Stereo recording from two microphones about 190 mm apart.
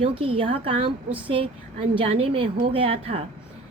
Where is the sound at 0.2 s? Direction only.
30° right (ahead or behind).